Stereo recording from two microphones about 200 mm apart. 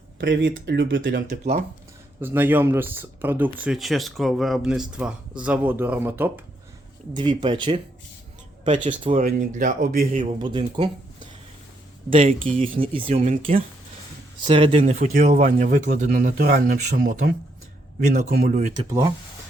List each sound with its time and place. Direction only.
0.2 s speech: 60° right (ahead or behind)
2.2 s speech: 10° right (ahead or behind)
7.1 s speech: 20° right (ahead or behind)
9.1 s speech: 45° right (ahead or behind)
10.3 s speech: 25° right (ahead or behind)
12.1 s speech: 40° right (ahead or behind)
12.5 s speech: 25° right (ahead or behind)
18.9 s speech: 15° right (ahead or behind)